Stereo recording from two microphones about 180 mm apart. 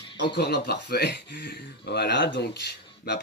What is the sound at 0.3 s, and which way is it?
Speech, 65° left (ahead or behind).